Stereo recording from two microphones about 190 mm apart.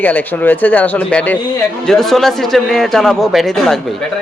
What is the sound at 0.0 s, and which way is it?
A man's voice, 10° left (ahead or behind).